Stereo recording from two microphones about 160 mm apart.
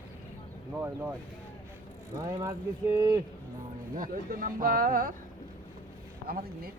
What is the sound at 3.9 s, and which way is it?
Speech, 60° right (ahead or behind).